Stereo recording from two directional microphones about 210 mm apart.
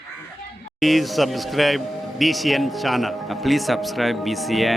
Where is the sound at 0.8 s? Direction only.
Centre (ahead or behind).